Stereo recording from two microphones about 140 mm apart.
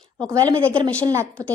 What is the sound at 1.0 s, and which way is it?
Speech, 20° right (ahead or behind).